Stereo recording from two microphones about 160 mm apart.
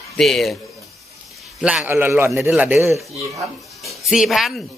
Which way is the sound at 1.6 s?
5° right (ahead or behind).